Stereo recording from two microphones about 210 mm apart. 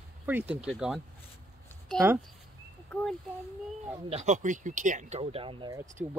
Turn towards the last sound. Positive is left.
turn(degrees=-5)  # may be behind; listen again after turning